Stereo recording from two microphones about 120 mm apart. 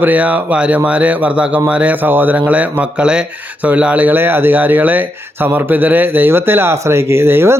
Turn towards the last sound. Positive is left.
turn(degrees=-20)  # may be behind; listen again after turning